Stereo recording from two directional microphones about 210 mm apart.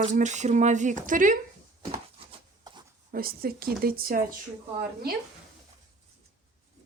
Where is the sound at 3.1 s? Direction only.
45° right (ahead or behind).